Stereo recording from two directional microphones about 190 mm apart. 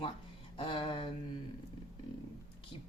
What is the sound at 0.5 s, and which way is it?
Speech, 25° left (ahead or behind).